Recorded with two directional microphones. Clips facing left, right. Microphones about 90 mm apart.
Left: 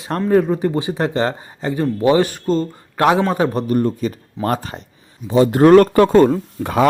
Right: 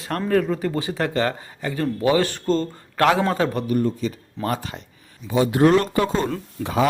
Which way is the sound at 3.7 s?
45° left (ahead or behind).